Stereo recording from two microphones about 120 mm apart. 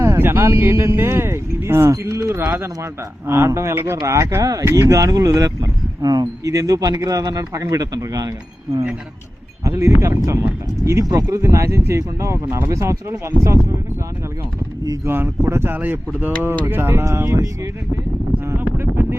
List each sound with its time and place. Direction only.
0.0 s speech: 20° right (ahead or behind)
9.6 s speech: 25° right (ahead or behind)
14.8 s speech: 20° right (ahead or behind)
18.4 s a sound: 20° right (ahead or behind)